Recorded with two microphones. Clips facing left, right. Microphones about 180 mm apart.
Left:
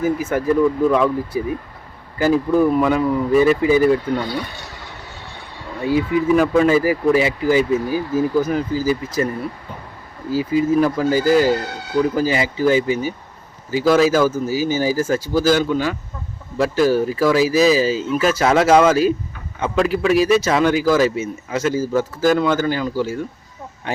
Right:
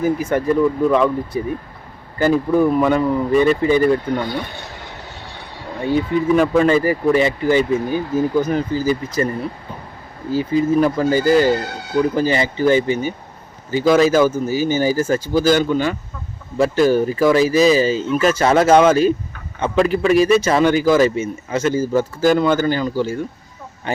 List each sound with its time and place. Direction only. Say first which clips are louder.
0.0 s a man's voice: right 1 dB; 5° left (ahead or behind)
5.8 s a man's voice: even; 5° left (ahead or behind)